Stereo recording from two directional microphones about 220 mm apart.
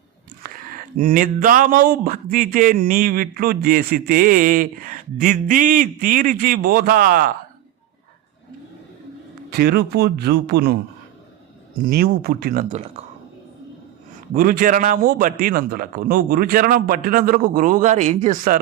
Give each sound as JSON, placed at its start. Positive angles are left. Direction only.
{"t": 0.4, "sound": "speech", "side_deg": -40}
{"t": 9.5, "sound": "speech", "side_deg": -45}
{"t": 11.8, "sound": "speech", "side_deg": -40}
{"t": 14.3, "sound": "speech", "side_deg": -40}